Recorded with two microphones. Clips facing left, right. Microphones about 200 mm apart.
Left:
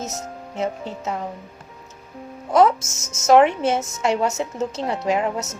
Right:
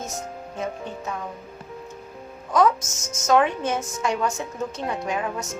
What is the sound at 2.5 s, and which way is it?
Speech, 25° left (ahead or behind).